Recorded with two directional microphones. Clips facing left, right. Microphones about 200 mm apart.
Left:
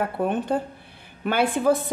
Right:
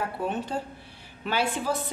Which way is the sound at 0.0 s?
55° left (ahead or behind).